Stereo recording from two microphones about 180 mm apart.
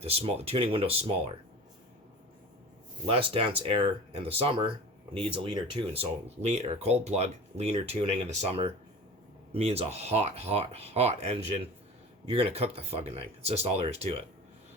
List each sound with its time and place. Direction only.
0.0 s speech: 35° right (ahead or behind)
3.1 s speech: 30° right (ahead or behind)